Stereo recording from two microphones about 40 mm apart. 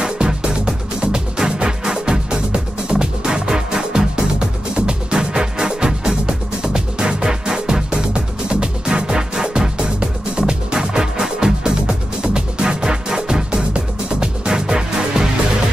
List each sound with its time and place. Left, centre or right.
0.0 s music: right